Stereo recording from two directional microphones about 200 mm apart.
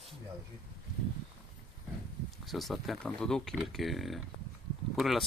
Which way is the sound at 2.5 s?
Centre (ahead or behind).